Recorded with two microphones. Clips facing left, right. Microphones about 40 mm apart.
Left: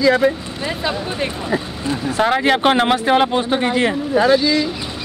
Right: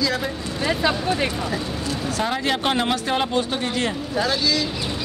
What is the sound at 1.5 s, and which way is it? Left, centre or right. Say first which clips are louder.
Speech: left 5 dB; left.